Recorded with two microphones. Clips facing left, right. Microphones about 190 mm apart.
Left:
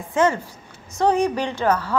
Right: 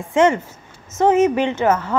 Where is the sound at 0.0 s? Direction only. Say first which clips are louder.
Right 4 dB; 25° right (ahead or behind).